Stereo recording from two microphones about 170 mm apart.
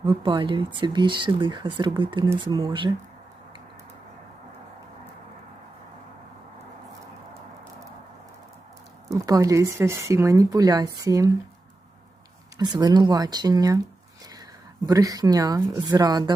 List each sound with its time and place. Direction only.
0.0 s speech: 30° right (ahead or behind)
9.2 s speech: 20° right (ahead or behind)
12.5 s speech: 25° right (ahead or behind)
14.8 s speech: 20° right (ahead or behind)